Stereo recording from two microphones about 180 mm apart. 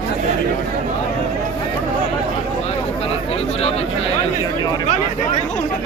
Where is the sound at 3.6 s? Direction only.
35° left (ahead or behind).